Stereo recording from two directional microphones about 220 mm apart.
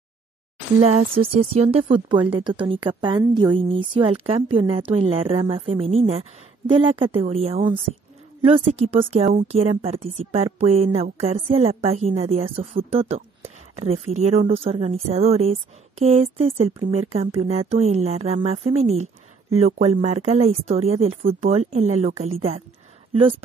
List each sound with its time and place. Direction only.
0.8 s speech: 25° right (ahead or behind)